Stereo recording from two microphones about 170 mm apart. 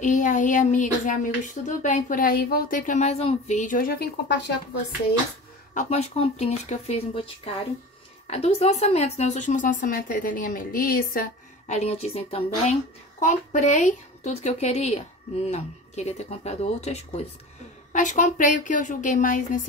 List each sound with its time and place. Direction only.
0.0 s speech: 50° left (ahead or behind)
5.8 s speech: 40° left (ahead or behind)
8.3 s speech: 35° left (ahead or behind)